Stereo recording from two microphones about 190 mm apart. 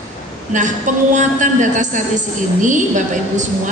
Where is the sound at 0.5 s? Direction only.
40° right (ahead or behind).